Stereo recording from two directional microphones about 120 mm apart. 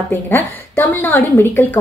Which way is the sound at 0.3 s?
15° left (ahead or behind).